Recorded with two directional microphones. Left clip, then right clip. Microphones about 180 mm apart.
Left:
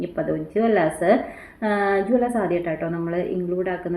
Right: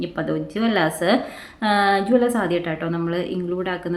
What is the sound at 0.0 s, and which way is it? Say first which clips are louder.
Speech: even; 25° right (ahead or behind).